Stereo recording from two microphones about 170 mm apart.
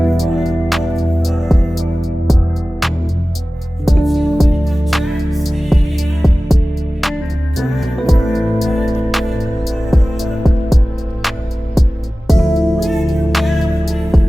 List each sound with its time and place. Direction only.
0.0 s music: centre (ahead or behind)
3.8 s music: centre (ahead or behind)
7.6 s music: centre (ahead or behind)